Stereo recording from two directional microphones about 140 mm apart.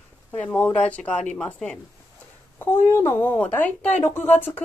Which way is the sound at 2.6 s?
15° left (ahead or behind).